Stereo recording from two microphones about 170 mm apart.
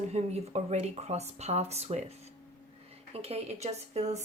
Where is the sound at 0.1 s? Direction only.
40° right (ahead or behind).